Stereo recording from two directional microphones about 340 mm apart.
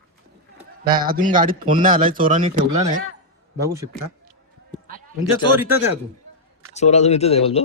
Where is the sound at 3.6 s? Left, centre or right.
Centre.